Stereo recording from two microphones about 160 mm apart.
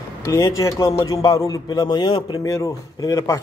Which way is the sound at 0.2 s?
20° left (ahead or behind).